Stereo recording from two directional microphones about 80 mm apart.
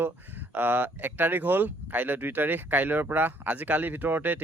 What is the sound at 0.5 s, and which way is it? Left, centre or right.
Speech, right.